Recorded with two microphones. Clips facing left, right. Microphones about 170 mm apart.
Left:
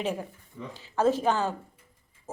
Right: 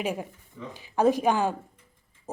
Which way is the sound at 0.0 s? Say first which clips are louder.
Right 1 dB; 10° right (ahead or behind).